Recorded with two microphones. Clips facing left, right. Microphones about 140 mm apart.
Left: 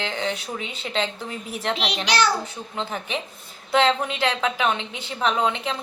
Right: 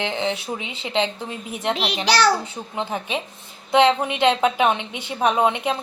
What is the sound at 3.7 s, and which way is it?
A woman's voice, 20° right (ahead or behind).